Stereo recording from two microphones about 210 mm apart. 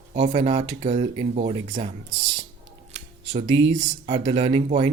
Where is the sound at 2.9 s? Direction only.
35° right (ahead or behind).